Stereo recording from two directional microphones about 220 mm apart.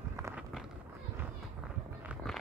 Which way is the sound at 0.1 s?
10° right (ahead or behind).